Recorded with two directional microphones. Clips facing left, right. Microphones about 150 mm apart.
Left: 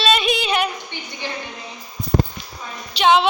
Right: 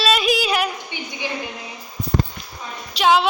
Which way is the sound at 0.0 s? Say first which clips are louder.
Even; 5° right (ahead or behind).